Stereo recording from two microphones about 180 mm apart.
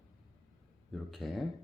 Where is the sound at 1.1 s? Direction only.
Centre (ahead or behind).